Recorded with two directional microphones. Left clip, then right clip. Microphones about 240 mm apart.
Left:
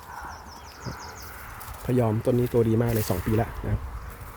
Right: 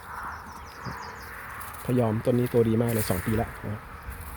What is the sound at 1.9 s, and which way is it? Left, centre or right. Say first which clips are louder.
Speech: left 1 dB; centre.